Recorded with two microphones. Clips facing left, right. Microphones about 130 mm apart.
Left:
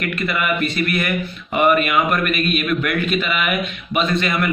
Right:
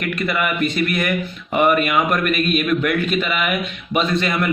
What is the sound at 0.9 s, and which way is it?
Speech, 45° right (ahead or behind).